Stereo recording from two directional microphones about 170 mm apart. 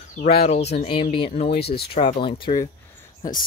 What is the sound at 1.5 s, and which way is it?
Speech, 70° left (ahead or behind).